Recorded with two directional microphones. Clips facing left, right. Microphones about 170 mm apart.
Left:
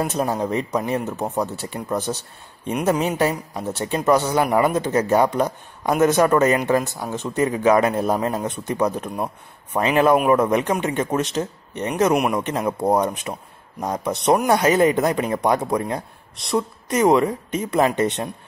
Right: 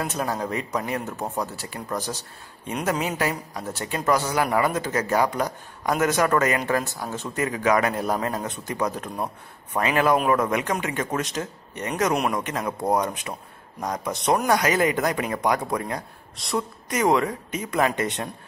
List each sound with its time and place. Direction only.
0.0 s a man's voice: 25° left (ahead or behind)
2.7 s speech: 15° left (ahead or behind)
3.0 s a man's voice: 30° left (ahead or behind)
12.4 s a man's voice: 25° left (ahead or behind)